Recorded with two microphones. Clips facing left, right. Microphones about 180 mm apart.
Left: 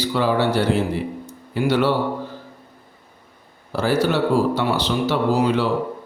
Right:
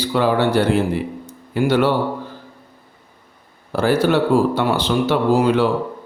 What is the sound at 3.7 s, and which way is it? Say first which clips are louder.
A man's voice: right 3 dB; 55° right (ahead or behind).